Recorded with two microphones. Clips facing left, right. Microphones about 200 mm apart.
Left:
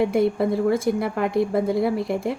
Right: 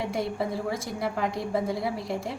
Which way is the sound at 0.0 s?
55° left (ahead or behind).